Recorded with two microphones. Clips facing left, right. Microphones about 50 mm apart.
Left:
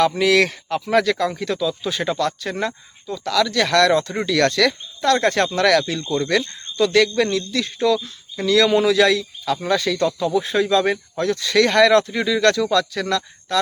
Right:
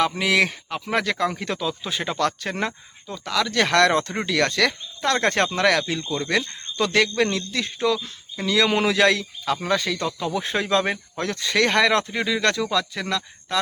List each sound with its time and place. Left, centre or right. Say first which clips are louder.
0.2 s speech: left 4 dB; centre
1.3 s speech: left 4 dB; right
1.9 s speech: left 4 dB; centre
2.1 s speech: left 1 dB; right
3.5 s speech: left 1 dB; right
4.3 s speech: left 4 dB; right
5.5 s speech: left 3 dB; right
6.7 s speech: left 4 dB; right
8.7 s speech: left 3 dB; right
9.6 s speech: left 6 dB; right
10.3 s speech: left 2 dB; right; by 13.6 s centre